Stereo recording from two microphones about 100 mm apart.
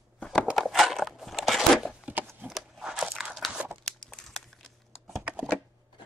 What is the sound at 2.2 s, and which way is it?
Crumpling, 5° right (ahead or behind).